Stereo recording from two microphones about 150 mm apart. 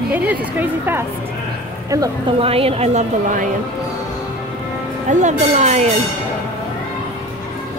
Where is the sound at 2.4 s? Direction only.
40° right (ahead or behind).